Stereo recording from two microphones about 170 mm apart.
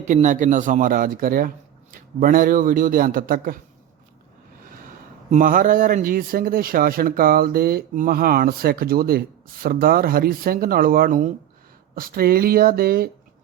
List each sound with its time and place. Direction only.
0.0 s speech: 45° right (ahead or behind)
5.3 s speech: 50° right (ahead or behind)